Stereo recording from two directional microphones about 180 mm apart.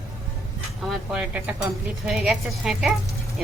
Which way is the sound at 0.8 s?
Centre (ahead or behind).